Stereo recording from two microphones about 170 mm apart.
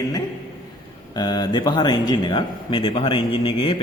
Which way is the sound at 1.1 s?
25° left (ahead or behind).